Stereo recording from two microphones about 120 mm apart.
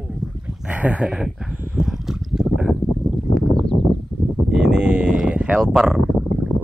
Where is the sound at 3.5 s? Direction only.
5° left (ahead or behind).